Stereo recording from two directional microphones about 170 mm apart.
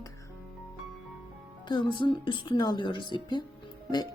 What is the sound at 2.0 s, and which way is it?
Speech, 30° left (ahead or behind).